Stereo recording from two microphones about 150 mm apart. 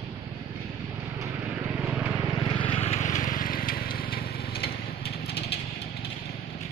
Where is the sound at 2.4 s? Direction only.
35° left (ahead or behind); by 4.7 s 90° left.